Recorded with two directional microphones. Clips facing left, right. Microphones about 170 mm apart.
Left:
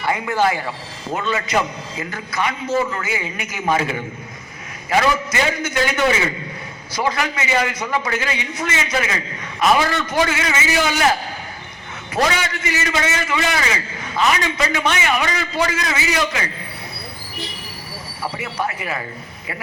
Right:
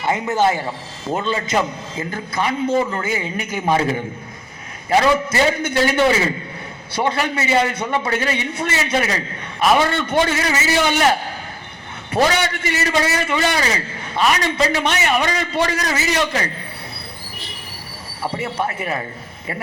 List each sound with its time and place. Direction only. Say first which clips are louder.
0.0 s a man's voice: right 1 dB; 20° right (ahead or behind)
12.1 s a man's voice: right 3 dB; 35° right (ahead or behind)
18.5 s a man's voice: right 2 dB; 30° right (ahead or behind)